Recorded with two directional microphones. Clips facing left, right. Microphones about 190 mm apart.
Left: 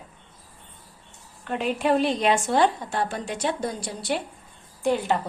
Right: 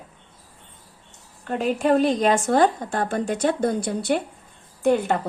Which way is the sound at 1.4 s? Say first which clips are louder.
Right 3 dB; 40° right (ahead or behind).